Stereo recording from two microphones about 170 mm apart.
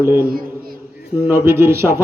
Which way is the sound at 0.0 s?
15° right (ahead or behind).